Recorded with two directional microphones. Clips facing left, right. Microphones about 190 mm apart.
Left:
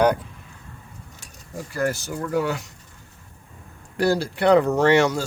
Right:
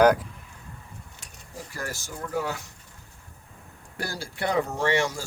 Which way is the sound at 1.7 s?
65° left (ahead or behind).